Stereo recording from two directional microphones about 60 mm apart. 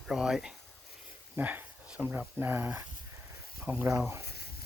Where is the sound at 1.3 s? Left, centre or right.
Right.